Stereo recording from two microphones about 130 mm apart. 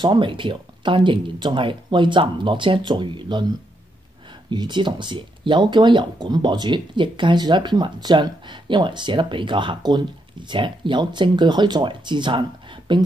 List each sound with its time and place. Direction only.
0.0 s speech: 40° right (ahead or behind)